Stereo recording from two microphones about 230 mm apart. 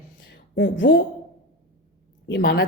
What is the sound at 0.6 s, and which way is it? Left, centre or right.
Speech, left.